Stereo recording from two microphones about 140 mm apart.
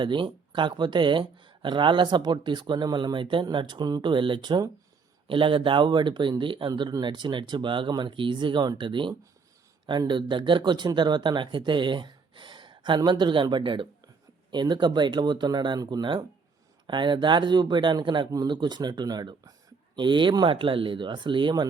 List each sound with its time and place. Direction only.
0.0 s speech: 35° right (ahead or behind)